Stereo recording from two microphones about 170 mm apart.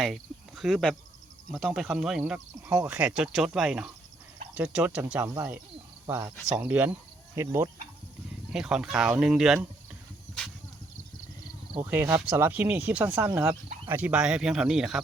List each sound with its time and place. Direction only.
0.0 s speech: centre (ahead or behind)
8.5 s speech: 5° right (ahead or behind)
11.8 s speech: 10° right (ahead or behind)